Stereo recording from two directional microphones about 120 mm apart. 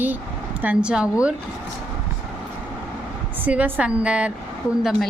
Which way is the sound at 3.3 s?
15° right (ahead or behind).